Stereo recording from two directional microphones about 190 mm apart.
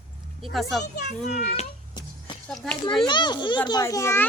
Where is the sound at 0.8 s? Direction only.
40° left (ahead or behind).